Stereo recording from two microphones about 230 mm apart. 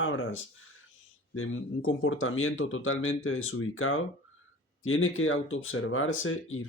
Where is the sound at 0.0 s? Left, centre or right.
Left.